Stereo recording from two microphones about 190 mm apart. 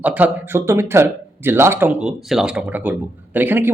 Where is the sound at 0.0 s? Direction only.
10° right (ahead or behind).